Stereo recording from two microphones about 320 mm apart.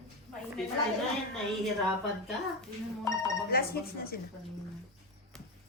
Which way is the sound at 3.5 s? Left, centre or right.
Left.